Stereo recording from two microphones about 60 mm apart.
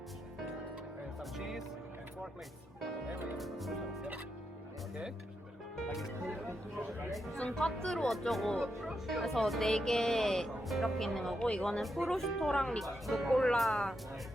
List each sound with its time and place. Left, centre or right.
1.4 s music: centre
3.1 s speech: right
3.3 s speech: centre
5.7 s speech: centre
7.5 s speech: centre
11.4 s speech: centre
11.8 s speech: centre